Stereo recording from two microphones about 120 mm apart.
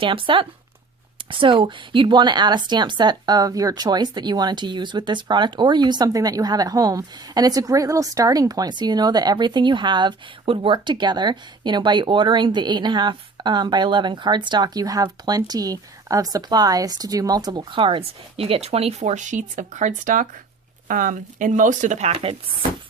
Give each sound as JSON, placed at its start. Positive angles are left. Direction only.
{"t": 0.0, "sound": "speech", "side_deg": -45}
{"t": 17.7, "sound": "speech", "side_deg": -45}
{"t": 22.1, "sound": "speech", "side_deg": -50}